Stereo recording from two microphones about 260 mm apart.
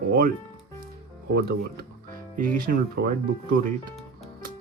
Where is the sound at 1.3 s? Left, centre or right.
Right.